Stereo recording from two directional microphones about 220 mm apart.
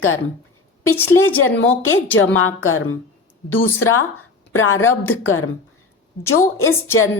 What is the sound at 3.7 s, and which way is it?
A woman's voice, 80° left.